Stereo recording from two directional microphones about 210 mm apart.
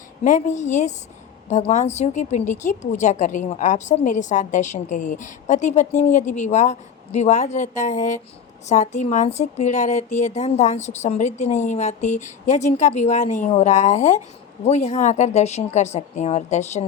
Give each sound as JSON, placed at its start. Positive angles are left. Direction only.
{"t": 0.3, "sound": "a woman's voice", "side_deg": 35}